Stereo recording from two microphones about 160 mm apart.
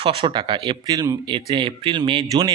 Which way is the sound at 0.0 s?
35° right (ahead or behind).